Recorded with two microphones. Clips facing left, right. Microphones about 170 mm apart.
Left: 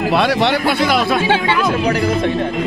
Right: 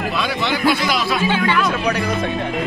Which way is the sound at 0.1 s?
65° left (ahead or behind).